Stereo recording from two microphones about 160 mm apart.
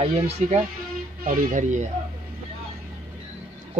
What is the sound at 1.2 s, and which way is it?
Speech, 50° right (ahead or behind).